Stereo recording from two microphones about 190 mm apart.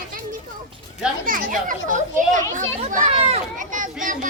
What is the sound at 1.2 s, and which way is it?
A child's voice, 45° right (ahead or behind).